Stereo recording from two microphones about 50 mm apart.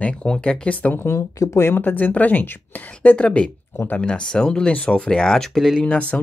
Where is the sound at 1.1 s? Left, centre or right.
Left.